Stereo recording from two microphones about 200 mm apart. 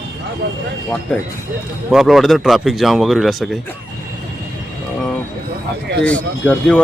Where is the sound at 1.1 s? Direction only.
5° left (ahead or behind).